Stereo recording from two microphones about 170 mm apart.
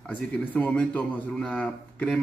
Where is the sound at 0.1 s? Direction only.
10° left (ahead or behind).